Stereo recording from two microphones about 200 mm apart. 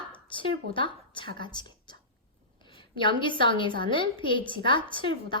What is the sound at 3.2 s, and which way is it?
A woman's voice, 25° left (ahead or behind).